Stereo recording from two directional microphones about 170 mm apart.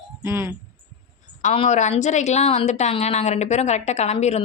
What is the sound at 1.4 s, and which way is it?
A woman's voice, 40° left (ahead or behind).